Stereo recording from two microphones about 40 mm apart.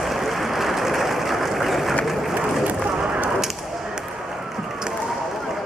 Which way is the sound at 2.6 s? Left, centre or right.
Right.